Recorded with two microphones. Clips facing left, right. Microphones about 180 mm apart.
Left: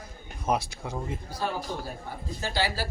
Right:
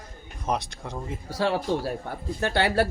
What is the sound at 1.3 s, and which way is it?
Speech, 75° right (ahead or behind).